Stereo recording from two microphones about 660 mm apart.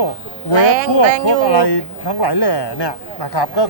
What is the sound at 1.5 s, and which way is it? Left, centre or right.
Speech, left.